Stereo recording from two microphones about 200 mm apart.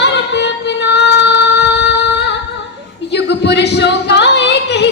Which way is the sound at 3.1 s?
60° left (ahead or behind).